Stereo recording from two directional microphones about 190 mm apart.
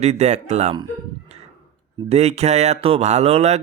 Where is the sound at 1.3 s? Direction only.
35° right (ahead or behind).